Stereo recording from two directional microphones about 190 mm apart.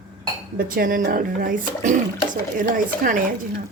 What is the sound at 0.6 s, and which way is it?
Speech, 50° right (ahead or behind).